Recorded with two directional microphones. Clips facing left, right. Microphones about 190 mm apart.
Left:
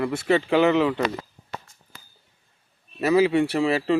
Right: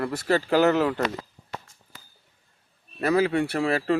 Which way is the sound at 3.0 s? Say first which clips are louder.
Left 3 dB; 5° left (ahead or behind).